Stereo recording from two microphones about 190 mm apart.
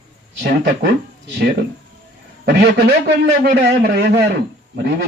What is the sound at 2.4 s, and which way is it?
A man's voice, 60° right (ahead or behind).